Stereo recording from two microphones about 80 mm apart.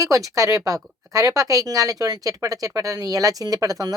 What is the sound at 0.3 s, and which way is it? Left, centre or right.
Speech, right.